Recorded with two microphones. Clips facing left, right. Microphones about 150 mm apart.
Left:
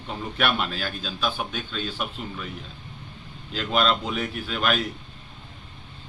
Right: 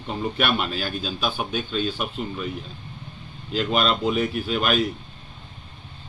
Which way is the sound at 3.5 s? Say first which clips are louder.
Right 1 dB; 10° right (ahead or behind).